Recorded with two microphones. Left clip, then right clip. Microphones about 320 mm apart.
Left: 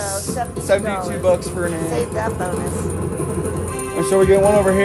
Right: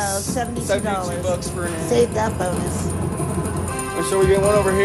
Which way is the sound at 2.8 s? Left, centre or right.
Centre.